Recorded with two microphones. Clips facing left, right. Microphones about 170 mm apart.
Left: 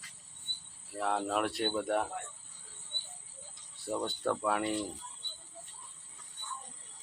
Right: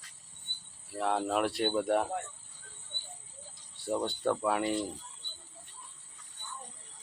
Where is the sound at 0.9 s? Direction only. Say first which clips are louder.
Right 2 dB; centre (ahead or behind).